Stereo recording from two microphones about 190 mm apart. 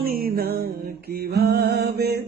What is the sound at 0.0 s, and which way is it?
Music, 50° right (ahead or behind).